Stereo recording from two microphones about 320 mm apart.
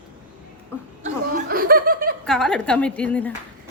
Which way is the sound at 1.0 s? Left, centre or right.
Right.